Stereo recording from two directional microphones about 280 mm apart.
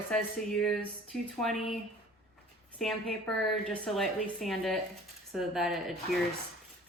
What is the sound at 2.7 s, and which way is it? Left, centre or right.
A woman's voice, centre.